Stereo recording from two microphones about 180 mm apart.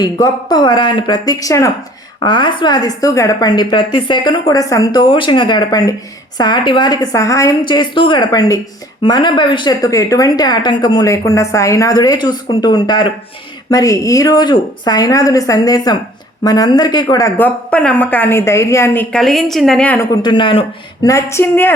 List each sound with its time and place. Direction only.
0.0 s a woman's voice: 25° left (ahead or behind)
19.1 s a woman's voice: centre (ahead or behind)
20.1 s a woman's voice: 25° left (ahead or behind)
21.1 s speech: 15° left (ahead or behind)